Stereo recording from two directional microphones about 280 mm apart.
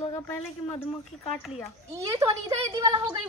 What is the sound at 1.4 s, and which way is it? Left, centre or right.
Speech, centre.